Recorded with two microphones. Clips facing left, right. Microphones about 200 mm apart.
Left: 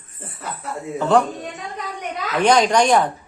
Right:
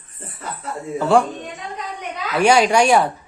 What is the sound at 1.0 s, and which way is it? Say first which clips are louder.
Speech: right 1 dB; 10° right (ahead or behind).